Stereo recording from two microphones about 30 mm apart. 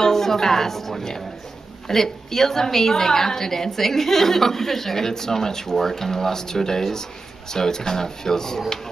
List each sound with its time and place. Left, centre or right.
0.0 s a woman's voice: centre